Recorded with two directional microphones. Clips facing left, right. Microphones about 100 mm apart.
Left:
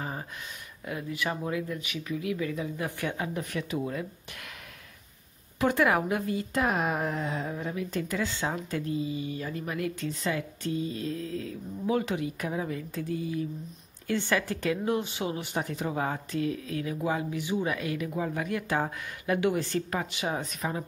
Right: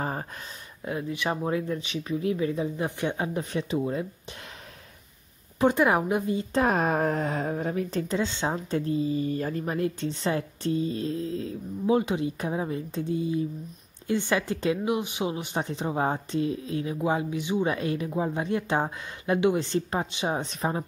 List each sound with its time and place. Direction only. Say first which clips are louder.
0.0 s a sound: right 5 dB; 40° right (ahead or behind)
0.8 s a woman's voice: right 3 dB; 25° right (ahead or behind)
5.6 s a woman's voice: right 3 dB; 25° right (ahead or behind)